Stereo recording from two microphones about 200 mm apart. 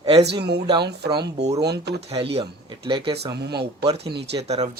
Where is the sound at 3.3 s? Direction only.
55° right (ahead or behind).